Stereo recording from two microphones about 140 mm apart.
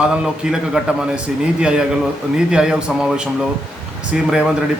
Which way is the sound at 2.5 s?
5° right (ahead or behind).